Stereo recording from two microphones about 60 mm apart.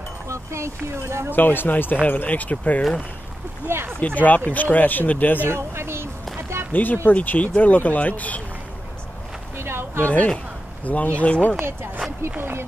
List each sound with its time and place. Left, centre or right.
0.3 s speech: right
1.3 s speech: left
3.6 s speech: right
4.0 s speech: left
5.5 s speech: right
6.7 s speech: left
9.6 s a sound: right
10.0 s speech: left
10.3 s a sound: left
11.1 s speech: left
11.5 s speech: right